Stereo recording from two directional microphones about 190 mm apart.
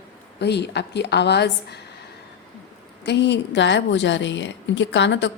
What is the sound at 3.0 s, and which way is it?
A woman's voice, 65° left (ahead or behind).